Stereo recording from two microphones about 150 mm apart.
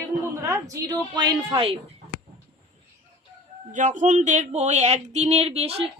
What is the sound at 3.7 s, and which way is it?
Speech, 55° right (ahead or behind).